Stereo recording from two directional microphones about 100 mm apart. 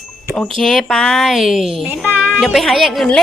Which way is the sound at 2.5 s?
Centre (ahead or behind).